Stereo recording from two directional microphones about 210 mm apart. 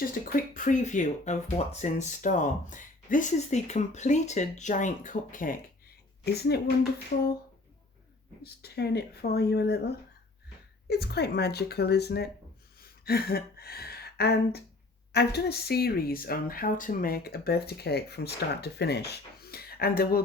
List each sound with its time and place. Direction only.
0.0 s speech: 40° left (ahead or behind)
7.1 s speech: 45° left (ahead or behind)
8.4 s speech: 50° left (ahead or behind)
12.8 s a sound: 45° left (ahead or behind)
15.1 s speech: 50° left (ahead or behind)